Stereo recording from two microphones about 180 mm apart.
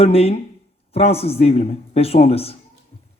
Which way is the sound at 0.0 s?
35° left (ahead or behind).